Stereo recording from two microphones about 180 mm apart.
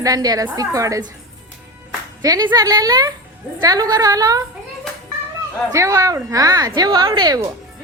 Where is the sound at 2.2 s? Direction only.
20° right (ahead or behind).